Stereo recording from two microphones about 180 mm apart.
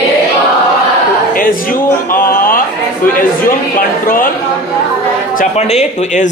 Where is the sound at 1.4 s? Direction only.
50° left (ahead or behind).